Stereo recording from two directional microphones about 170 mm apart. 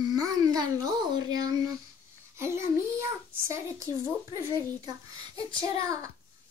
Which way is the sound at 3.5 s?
15° right (ahead or behind).